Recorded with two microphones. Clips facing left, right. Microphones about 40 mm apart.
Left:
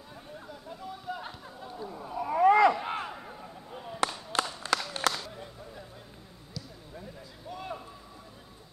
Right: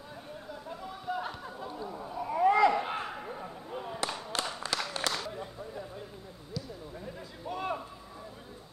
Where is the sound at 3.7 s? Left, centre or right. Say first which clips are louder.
Right 3 dB; centre.